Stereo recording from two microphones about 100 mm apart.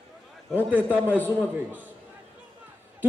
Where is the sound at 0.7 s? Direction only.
15° right (ahead or behind).